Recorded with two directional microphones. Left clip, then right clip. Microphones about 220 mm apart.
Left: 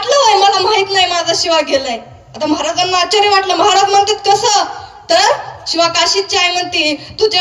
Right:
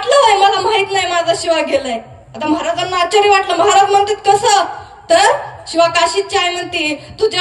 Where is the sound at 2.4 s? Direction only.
10° left (ahead or behind).